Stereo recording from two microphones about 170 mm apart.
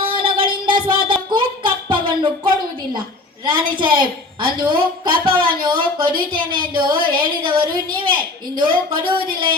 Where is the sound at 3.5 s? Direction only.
25° right (ahead or behind).